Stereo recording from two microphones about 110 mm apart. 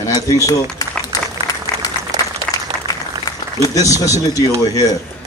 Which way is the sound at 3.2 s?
35° left (ahead or behind).